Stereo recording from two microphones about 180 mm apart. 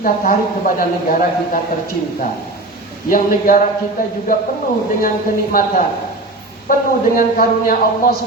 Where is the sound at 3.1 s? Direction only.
50° left (ahead or behind).